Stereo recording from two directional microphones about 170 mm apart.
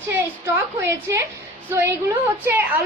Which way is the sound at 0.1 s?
15° right (ahead or behind).